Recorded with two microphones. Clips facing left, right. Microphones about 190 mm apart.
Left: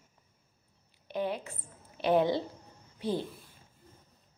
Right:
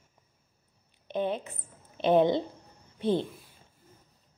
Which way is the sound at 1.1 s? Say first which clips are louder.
Right 3 dB; 20° right (ahead or behind).